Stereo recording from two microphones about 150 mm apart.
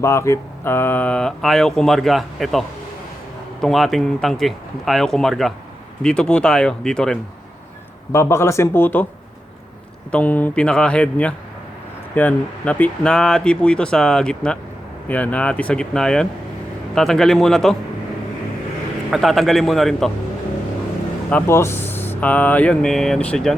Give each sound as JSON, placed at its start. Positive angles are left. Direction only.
{"t": 0.0, "sound": "speech", "side_deg": 20}
{"t": 8.1, "sound": "speech", "side_deg": 20}
{"t": 10.1, "sound": "speech", "side_deg": 10}
{"t": 19.1, "sound": "speech", "side_deg": 0}
{"t": 21.2, "sound": "speech", "side_deg": 15}